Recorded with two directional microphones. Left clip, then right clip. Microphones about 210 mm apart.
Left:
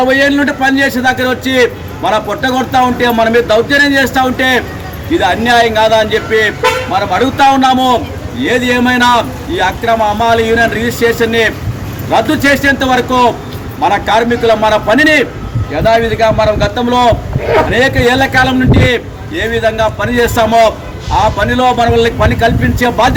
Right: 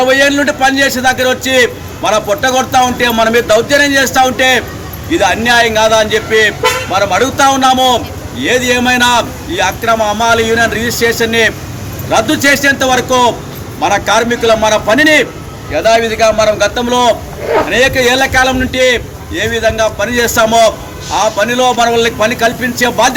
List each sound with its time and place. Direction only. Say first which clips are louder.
0.0 s a man's voice: right 1 dB; 5° right (ahead or behind)